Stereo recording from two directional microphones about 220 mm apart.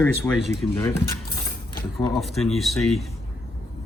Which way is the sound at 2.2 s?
Centre (ahead or behind).